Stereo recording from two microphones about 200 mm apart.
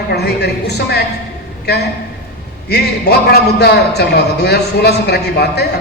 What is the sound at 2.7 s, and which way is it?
A man's voice, 55° left (ahead or behind).